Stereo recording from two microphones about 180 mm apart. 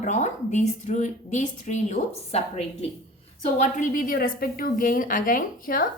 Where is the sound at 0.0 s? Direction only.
40° left (ahead or behind).